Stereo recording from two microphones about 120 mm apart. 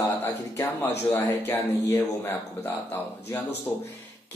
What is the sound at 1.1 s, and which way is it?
Speech, 20° left (ahead or behind).